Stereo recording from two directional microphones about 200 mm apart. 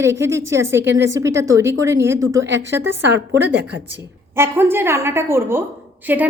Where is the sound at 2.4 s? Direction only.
65° right (ahead or behind).